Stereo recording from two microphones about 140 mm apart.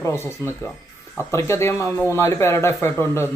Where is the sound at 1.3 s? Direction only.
20° left (ahead or behind).